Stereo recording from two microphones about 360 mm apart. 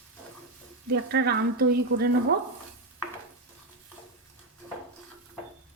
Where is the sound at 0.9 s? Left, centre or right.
Right.